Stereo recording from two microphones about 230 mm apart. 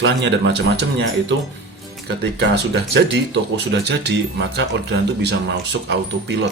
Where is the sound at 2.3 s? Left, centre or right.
Right.